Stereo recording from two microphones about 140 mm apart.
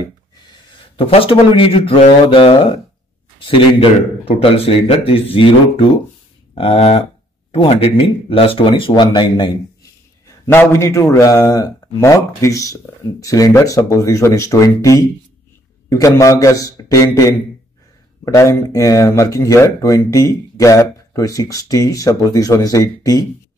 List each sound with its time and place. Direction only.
0.7 s speech: 40° left (ahead or behind)
3.3 s a sound: 40° left (ahead or behind)
4.3 s speech: 40° left (ahead or behind)
10.4 s speech: 20° left (ahead or behind)